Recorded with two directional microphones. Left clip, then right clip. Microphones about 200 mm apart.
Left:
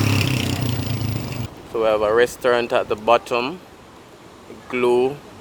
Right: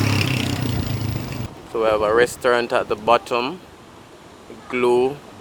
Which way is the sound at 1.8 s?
5° left (ahead or behind).